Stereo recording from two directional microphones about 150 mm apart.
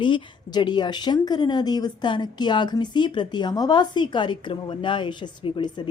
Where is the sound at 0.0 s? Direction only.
30° left (ahead or behind).